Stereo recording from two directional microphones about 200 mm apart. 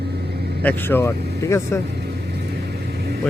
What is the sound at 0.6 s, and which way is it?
Speech, 10° left (ahead or behind).